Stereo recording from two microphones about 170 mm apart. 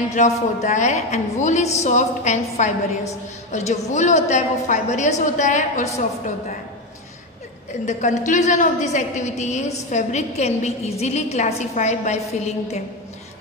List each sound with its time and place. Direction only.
0.1 s a woman's voice: 45° left (ahead or behind)
7.8 s a woman's voice: 45° left (ahead or behind)